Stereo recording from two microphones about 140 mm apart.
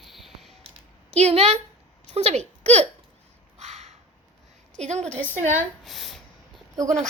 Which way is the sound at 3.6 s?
55° right (ahead or behind).